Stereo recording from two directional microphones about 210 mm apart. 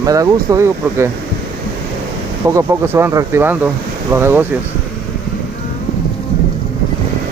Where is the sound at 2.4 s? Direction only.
15° right (ahead or behind).